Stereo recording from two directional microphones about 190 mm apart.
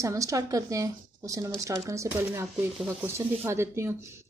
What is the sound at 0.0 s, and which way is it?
A woman's voice, 15° right (ahead or behind).